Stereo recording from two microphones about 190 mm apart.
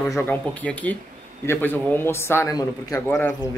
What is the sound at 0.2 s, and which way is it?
Speech, 10° left (ahead or behind).